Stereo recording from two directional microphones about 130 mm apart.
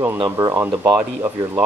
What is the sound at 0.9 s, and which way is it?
Speech, 10° right (ahead or behind).